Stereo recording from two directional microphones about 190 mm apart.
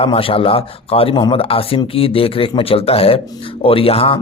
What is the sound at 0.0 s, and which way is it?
Speech, 30° left (ahead or behind).